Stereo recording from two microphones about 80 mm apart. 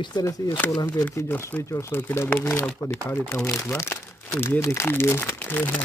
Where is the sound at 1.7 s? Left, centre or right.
Left.